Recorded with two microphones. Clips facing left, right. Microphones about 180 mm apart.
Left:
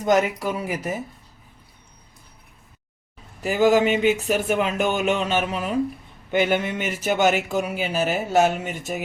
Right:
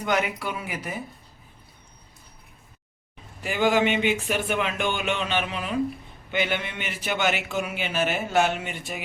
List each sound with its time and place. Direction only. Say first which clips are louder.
0.0 s speech: left 6 dB; 40° left (ahead or behind)
3.4 s speech: left 4 dB; 40° left (ahead or behind)